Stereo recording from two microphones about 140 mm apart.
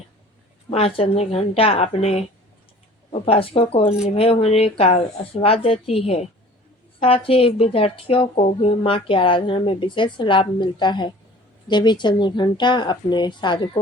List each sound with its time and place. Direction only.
0.7 s a woman's voice: 45° left (ahead or behind)